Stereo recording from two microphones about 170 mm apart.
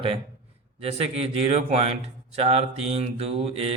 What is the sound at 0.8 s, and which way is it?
Speech, 35° right (ahead or behind).